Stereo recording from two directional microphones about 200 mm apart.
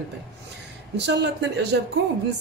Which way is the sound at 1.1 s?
60° right (ahead or behind).